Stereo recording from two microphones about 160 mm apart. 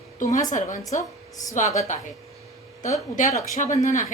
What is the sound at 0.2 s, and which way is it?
Speech, 55° left (ahead or behind).